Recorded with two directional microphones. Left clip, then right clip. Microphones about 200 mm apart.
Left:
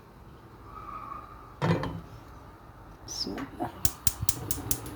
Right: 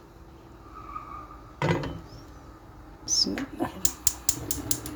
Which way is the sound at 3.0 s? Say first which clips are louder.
Right 9 dB; 25° right (ahead or behind).